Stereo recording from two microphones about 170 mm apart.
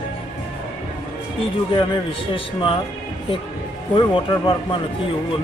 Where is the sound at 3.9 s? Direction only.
30° left (ahead or behind).